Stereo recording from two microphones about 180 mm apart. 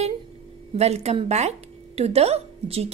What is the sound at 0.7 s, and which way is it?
Speech, 35° right (ahead or behind).